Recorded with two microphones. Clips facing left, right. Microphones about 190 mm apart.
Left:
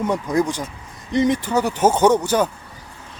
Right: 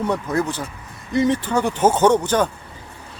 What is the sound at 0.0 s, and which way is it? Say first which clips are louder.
Speech: left 2 dB; 10° left (ahead or behind).